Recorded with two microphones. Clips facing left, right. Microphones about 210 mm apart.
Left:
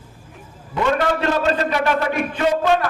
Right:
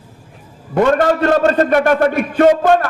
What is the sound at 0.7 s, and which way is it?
A man's voice, 50° right (ahead or behind).